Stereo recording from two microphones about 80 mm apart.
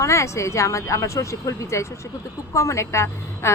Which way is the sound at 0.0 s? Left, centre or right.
Left.